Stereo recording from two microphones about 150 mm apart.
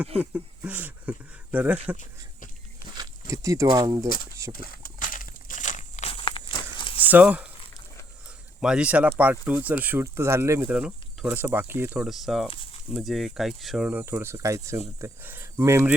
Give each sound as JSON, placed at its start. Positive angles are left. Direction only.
{"t": 0.2, "sound": "speech", "side_deg": -10}
{"t": 3.0, "sound": "speech", "side_deg": -20}
{"t": 4.5, "sound": "a sound", "side_deg": 75}
{"t": 6.1, "sound": "walk", "side_deg": 35}
{"t": 7.0, "sound": "speech", "side_deg": -10}
{"t": 8.6, "sound": "speech", "side_deg": -5}
{"t": 10.7, "sound": "speech", "side_deg": -5}
{"t": 12.0, "sound": "speech", "side_deg": 0}